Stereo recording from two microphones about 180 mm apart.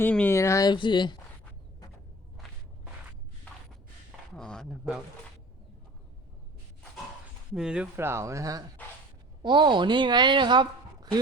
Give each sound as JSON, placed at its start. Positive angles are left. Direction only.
{"t": 0.0, "sound": "speech", "side_deg": 10}
{"t": 4.4, "sound": "a sound", "side_deg": 5}
{"t": 7.5, "sound": "a woman's voice", "side_deg": -5}